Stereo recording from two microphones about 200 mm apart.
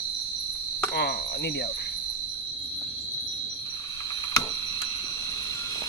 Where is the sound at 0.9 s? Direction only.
50° left (ahead or behind).